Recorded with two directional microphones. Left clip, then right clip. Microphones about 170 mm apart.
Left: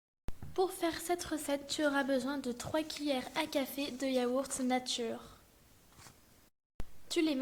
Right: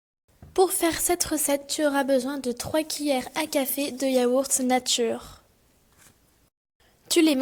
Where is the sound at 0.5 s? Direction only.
45° right (ahead or behind).